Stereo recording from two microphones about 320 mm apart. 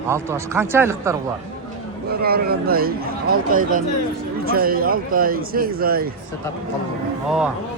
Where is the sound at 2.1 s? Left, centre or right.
Right.